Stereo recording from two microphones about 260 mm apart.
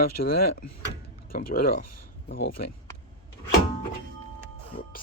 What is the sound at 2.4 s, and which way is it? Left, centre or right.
Speech, left.